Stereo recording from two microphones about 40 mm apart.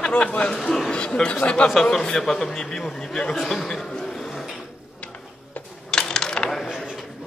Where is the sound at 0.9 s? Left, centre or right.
Left.